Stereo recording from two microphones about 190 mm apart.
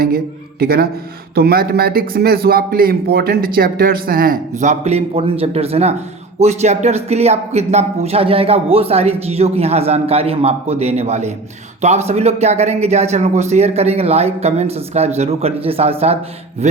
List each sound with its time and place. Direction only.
0.6 s a man's voice: 55° right (ahead or behind); by 16.1 s 35° right (ahead or behind)